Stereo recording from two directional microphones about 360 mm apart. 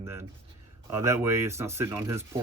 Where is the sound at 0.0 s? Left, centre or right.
Centre.